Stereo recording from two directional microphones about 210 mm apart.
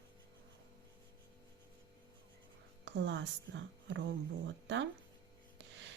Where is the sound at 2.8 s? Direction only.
55° right (ahead or behind).